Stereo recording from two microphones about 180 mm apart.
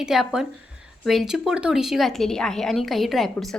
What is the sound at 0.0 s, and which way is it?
Speech, centre (ahead or behind).